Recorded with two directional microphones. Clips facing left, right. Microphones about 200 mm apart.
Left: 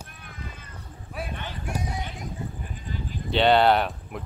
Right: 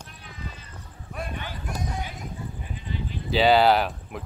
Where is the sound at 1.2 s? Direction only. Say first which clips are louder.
Even; 5° left (ahead or behind).